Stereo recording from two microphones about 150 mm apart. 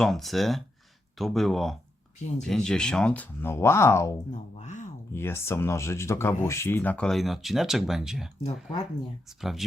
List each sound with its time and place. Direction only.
0.0 s speech: centre (ahead or behind); by 4.1 s 20° left (ahead or behind)
4.3 s speech: 50° left (ahead or behind)
5.1 s speech: 15° left (ahead or behind); by 8.3 s 5° right (ahead or behind)
9.4 s speech: centre (ahead or behind)